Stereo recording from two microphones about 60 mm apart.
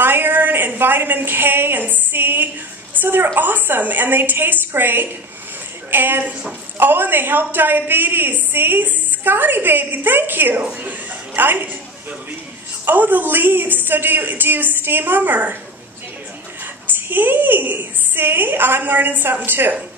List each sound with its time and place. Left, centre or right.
0.0 s a woman's voice: right
12.8 s a woman's voice: right
16.8 s a woman's voice: right